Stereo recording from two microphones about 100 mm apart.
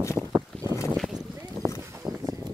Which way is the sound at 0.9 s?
Centre (ahead or behind).